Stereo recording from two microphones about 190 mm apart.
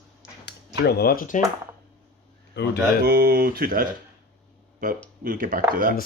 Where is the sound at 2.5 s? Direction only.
65° left (ahead or behind).